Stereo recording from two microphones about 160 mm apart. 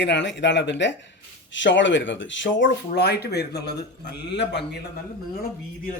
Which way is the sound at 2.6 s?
90° left.